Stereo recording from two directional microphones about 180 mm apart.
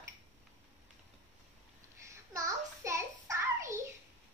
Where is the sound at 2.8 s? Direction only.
15° right (ahead or behind).